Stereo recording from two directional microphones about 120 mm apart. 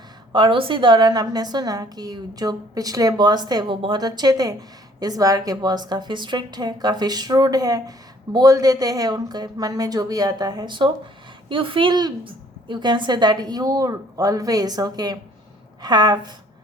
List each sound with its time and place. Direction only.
0.3 s a woman's voice: 45° right (ahead or behind)